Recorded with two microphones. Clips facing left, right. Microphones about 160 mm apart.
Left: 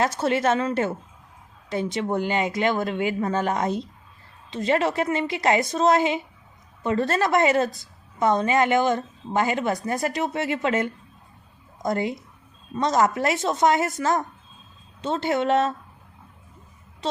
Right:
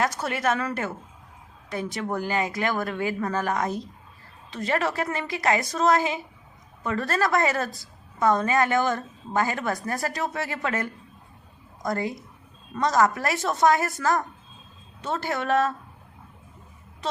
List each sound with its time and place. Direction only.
0.0 s a woman's voice: 25° left (ahead or behind)